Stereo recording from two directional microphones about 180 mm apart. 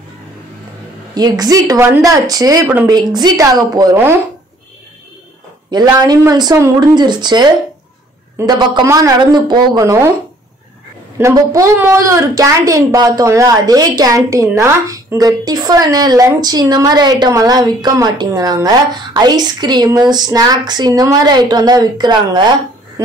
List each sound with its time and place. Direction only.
1.1 s a woman's voice: 20° right (ahead or behind)
5.7 s a woman's voice: 25° right (ahead or behind)
11.1 s a woman's voice: 15° right (ahead or behind)